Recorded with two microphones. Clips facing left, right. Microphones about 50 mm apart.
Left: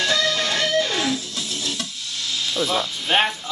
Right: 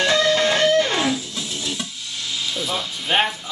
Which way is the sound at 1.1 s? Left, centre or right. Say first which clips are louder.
Even; centre.